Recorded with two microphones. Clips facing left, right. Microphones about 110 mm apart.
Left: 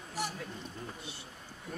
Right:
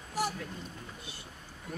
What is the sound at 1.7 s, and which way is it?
Speech, 5° right (ahead or behind).